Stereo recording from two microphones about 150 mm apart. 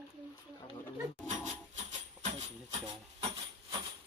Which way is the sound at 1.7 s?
50° right (ahead or behind).